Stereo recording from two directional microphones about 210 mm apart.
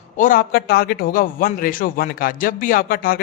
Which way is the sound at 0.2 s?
40° left (ahead or behind).